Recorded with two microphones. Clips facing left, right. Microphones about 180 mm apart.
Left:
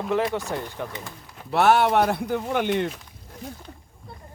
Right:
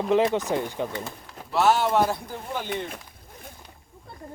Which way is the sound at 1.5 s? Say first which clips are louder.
Left 2 dB; 60° left (ahead or behind).